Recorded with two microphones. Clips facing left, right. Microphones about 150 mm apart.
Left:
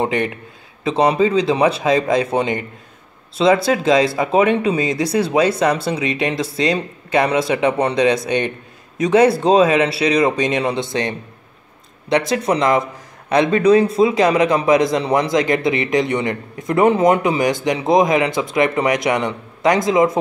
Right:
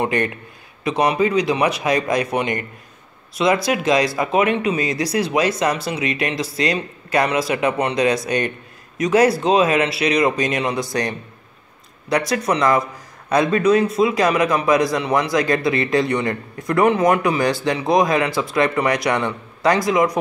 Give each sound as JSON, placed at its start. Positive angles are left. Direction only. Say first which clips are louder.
{"t": 0.0, "sound": "a man's voice", "louder": "left 1 dB", "side_deg": 20}